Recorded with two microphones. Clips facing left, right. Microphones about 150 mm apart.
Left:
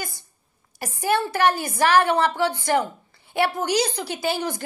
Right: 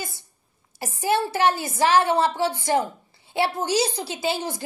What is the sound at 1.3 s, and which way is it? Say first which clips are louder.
A woman's voice: left 1 dB; 25° right (ahead or behind).